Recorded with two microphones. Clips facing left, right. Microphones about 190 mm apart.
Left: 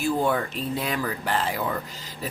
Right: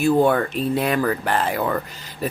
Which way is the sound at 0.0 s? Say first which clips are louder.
Right 7 dB; 65° right (ahead or behind).